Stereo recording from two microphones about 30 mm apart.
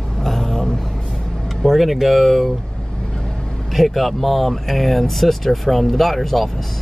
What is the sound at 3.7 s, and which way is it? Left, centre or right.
Speech, centre.